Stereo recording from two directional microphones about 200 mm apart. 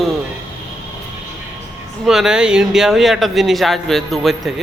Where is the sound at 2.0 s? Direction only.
Centre (ahead or behind).